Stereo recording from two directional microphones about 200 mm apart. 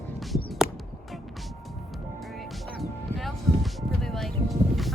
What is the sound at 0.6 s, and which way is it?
Music, 50° left (ahead or behind).